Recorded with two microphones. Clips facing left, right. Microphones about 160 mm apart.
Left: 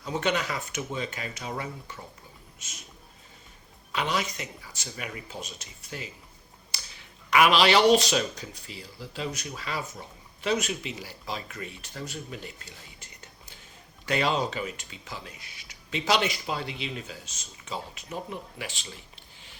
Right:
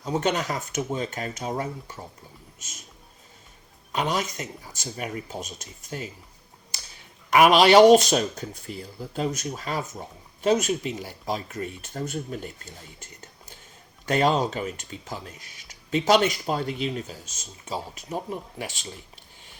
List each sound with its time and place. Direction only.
0.0 s speech: 40° right (ahead or behind)
3.9 s speech: 45° right (ahead or behind)
6.7 s a sound: 45° right (ahead or behind)
7.3 s speech: 45° right (ahead or behind)